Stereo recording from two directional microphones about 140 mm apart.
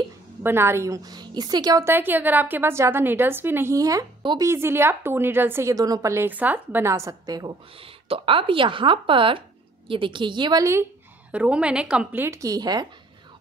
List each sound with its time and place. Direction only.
0.4 s a woman's voice: 15° right (ahead or behind)
1.9 s a woman's voice: 15° right (ahead or behind); by 4.5 s 30° right (ahead or behind)
4.5 s a woman's voice: 15° right (ahead or behind)
8.1 s speech: 40° right (ahead or behind); by 10.9 s 20° right (ahead or behind)
11.3 s a woman's voice: 10° right (ahead or behind); by 12.8 s 30° right (ahead or behind)